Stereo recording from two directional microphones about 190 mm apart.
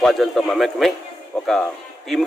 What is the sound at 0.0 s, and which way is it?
A man's voice, centre (ahead or behind).